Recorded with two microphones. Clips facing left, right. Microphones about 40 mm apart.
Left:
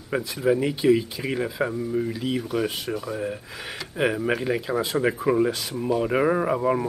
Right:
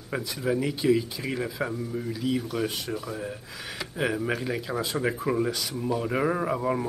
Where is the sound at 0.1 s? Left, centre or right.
Centre.